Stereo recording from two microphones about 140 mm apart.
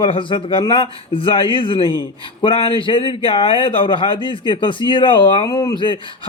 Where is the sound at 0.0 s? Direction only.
35° left (ahead or behind).